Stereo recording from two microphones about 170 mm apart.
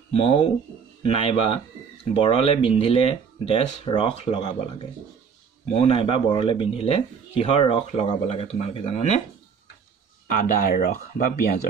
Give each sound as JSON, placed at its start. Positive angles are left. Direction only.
{"t": 0.1, "sound": "speech", "side_deg": 35}
{"t": 5.8, "sound": "speech", "side_deg": 35}
{"t": 10.2, "sound": "speech", "side_deg": 55}